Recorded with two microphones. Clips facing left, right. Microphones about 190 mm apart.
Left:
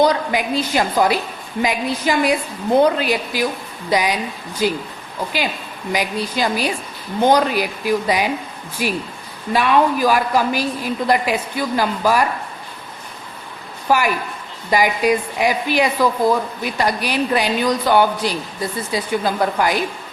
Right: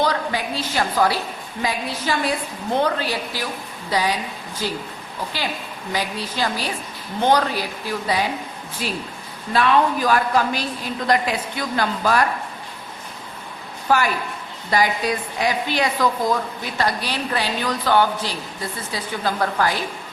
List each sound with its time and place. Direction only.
0.0 s a woman's voice: 15° left (ahead or behind)
5.9 s a woman's voice: 15° left (ahead or behind)
13.8 s a woman's voice: 10° left (ahead or behind)